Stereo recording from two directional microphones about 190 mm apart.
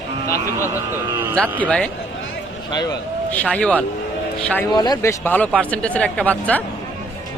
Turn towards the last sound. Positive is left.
turn(degrees=10)  # may be behind; listen again after turning